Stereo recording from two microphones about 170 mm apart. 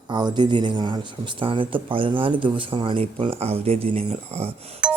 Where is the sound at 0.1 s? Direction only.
25° right (ahead or behind).